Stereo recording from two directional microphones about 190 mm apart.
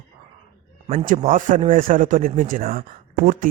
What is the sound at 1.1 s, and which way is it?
A man's voice, 45° right (ahead or behind).